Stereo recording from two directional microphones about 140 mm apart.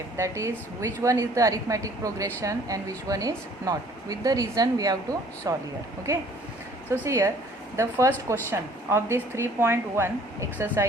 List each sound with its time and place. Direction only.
0.2 s a woman's voice: 20° right (ahead or behind)
7.0 s a woman's voice: 20° right (ahead or behind)